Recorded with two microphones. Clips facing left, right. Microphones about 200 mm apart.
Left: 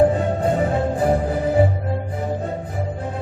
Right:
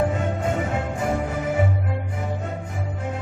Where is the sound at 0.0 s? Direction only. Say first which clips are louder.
Left 6 dB; 35° left (ahead or behind).